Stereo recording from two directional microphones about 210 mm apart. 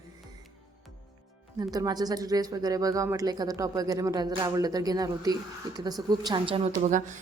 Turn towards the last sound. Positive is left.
turn(degrees=-35)  # may be behind; listen again after turning